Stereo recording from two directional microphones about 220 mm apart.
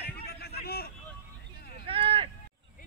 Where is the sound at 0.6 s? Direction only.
45° left (ahead or behind).